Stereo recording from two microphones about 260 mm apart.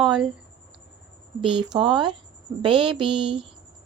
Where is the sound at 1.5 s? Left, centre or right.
Centre.